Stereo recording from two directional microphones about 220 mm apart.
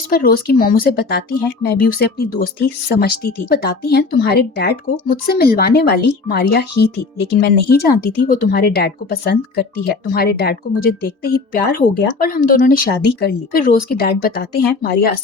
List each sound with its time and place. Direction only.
0.1 s speech: 40° left (ahead or behind)